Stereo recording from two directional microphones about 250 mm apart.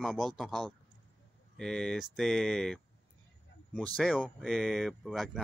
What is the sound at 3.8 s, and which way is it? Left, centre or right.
Speech, centre.